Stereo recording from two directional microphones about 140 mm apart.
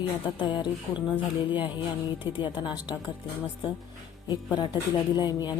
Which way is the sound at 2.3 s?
35° left (ahead or behind).